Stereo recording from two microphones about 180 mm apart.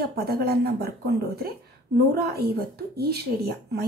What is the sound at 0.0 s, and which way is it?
A woman's voice, 60° right (ahead or behind).